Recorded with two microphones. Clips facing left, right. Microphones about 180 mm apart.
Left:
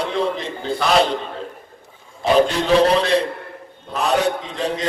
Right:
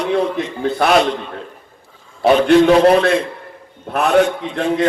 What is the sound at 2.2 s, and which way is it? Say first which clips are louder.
A man's voice: right 6 dB; 60° right (ahead or behind).